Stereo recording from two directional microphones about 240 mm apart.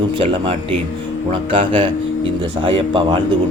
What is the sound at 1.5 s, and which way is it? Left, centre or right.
A man's voice, right.